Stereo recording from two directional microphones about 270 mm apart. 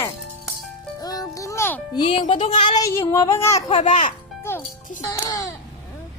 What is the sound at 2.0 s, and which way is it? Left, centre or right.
Child singing, centre.